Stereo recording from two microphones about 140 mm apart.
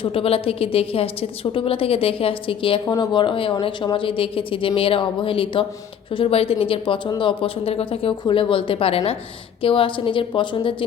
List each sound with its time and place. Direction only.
0.0 s a woman's voice: 40° left (ahead or behind)